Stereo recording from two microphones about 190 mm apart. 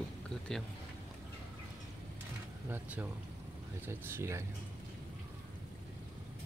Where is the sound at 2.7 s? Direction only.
10° right (ahead or behind).